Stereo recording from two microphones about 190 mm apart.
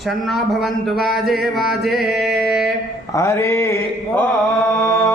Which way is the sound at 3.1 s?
15° left (ahead or behind).